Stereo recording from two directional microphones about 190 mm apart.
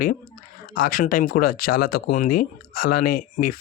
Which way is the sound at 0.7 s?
45° left (ahead or behind).